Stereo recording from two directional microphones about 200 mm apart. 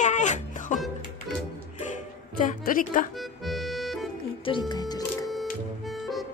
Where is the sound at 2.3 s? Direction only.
40° left (ahead or behind).